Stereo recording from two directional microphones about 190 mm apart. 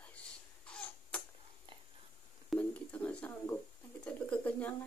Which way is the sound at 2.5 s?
10° left (ahead or behind).